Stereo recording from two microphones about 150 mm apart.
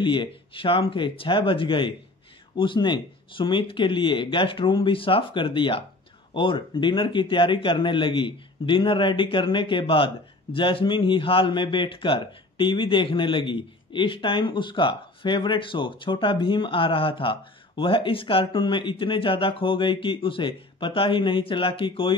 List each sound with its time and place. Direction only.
0.0 s a man's voice: 30° left (ahead or behind)